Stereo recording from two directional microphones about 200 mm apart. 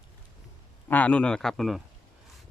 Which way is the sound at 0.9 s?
10° left (ahead or behind).